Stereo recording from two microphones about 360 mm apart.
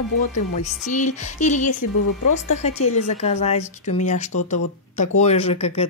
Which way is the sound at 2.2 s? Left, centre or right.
Left.